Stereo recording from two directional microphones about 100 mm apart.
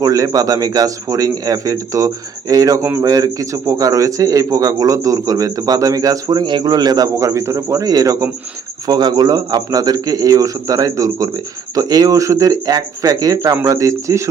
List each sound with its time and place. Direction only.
0.0 s a man's voice: 35° right (ahead or behind)